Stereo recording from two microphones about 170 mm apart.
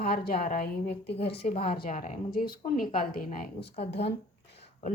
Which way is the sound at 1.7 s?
55° left (ahead or behind).